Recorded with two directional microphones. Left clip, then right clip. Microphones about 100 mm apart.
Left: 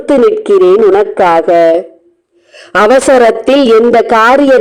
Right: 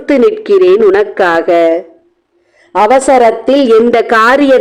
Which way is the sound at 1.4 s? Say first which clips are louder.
Left 2 dB; 35° left (ahead or behind).